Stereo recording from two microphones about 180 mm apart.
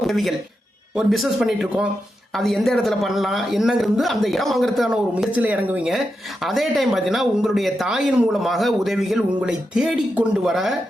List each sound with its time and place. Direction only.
0.0 s a man's voice: centre (ahead or behind)